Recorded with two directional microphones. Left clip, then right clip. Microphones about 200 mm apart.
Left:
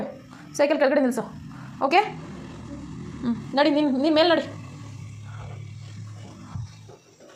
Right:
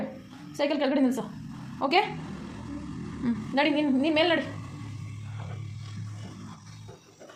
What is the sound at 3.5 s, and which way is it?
Speech, 25° left (ahead or behind).